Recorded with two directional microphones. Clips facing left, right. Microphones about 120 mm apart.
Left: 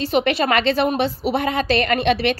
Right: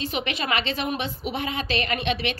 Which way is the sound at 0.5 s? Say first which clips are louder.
Left 8 dB; 45° left (ahead or behind).